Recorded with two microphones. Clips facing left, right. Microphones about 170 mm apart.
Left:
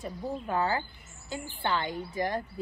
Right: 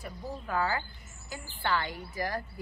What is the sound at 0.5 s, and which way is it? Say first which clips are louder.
Speech: left 1 dB; 20° left (ahead or behind).